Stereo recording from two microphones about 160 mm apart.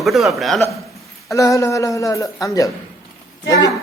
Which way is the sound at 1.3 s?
20° left (ahead or behind).